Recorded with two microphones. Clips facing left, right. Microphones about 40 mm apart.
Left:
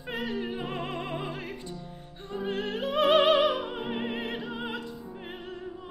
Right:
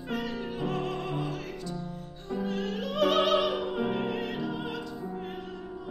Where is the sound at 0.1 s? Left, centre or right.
Left.